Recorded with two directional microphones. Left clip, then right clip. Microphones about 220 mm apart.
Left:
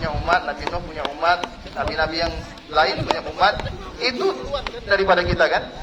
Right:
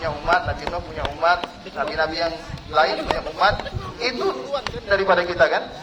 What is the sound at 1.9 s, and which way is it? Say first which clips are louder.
Speech: left 1 dB; 50° left (ahead or behind).